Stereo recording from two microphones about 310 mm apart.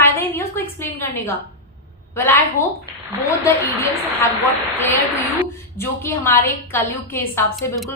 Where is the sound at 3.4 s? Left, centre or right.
Centre.